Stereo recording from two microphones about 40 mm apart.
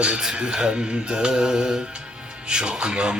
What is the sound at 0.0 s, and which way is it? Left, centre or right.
A man's voice, centre.